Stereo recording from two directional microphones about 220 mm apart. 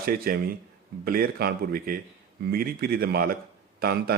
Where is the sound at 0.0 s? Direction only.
45° right (ahead or behind).